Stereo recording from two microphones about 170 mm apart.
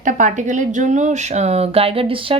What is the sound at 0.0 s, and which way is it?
A woman's voice, 45° right (ahead or behind).